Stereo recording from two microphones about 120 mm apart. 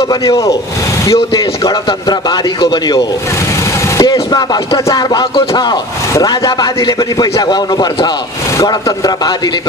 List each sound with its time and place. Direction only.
0.1 s speech: 30° left (ahead or behind)